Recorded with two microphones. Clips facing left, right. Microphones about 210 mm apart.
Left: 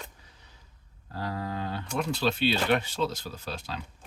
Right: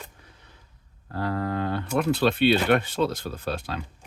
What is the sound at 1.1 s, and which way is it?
Speech, 60° right (ahead or behind).